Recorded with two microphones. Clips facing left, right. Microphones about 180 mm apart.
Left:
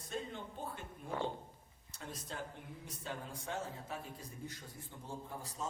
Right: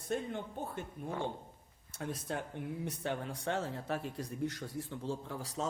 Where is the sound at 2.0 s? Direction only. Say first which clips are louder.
Right 7 dB; 60° right (ahead or behind).